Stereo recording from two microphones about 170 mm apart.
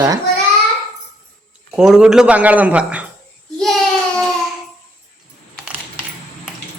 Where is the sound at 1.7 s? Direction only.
5° right (ahead or behind).